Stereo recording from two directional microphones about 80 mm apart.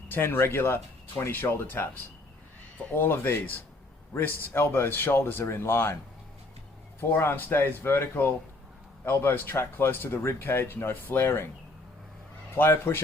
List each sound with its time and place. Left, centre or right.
0.1 s speech: left
2.9 s speech: left
7.1 s speech: left
12.5 s speech: left